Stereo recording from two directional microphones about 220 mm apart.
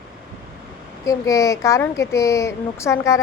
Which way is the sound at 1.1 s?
15° left (ahead or behind).